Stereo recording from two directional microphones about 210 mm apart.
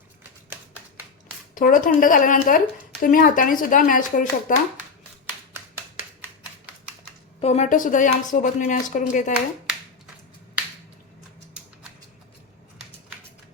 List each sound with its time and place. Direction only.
1.5 s a woman's voice: 40° left (ahead or behind)
7.3 s a woman's voice: 30° left (ahead or behind)
11.6 s rodents: 5° right (ahead or behind)